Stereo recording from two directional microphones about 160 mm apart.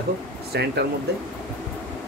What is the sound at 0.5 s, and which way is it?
Speech, 90° right.